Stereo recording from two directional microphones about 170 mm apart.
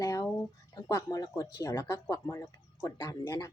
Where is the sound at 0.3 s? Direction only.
20° left (ahead or behind).